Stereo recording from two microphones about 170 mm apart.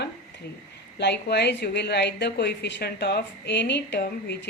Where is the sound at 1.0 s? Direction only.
85° left.